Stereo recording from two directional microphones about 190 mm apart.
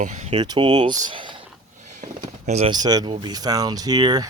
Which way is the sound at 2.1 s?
40° right (ahead or behind).